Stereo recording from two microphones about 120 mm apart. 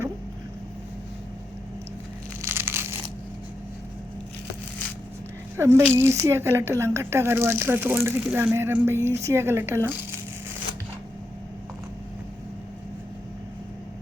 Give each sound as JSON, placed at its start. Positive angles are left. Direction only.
{"t": 2.4, "sound": "crumpling", "side_deg": -20}
{"t": 5.5, "sound": "speech", "side_deg": -25}